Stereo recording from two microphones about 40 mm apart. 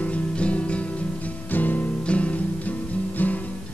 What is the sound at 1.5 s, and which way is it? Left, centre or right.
Music, left.